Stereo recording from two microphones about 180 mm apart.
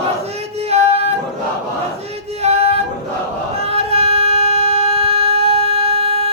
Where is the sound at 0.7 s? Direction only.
35° right (ahead or behind).